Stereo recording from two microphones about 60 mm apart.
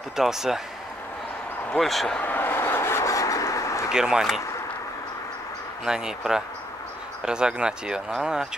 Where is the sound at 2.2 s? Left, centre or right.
Left.